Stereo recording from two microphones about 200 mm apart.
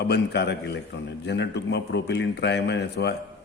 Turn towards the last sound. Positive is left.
turn(degrees=55)  # may be behind; listen again after turning